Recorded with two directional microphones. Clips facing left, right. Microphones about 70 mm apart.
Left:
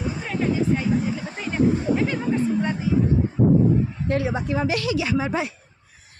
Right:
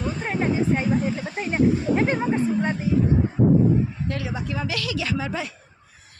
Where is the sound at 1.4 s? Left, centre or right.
Right.